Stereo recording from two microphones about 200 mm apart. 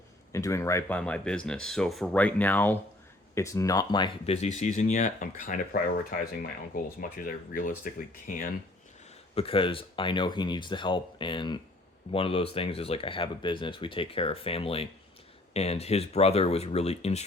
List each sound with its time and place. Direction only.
0.3 s speech: 15° left (ahead or behind); by 8.4 s 45° left (ahead or behind)
9.3 s speech: 25° left (ahead or behind)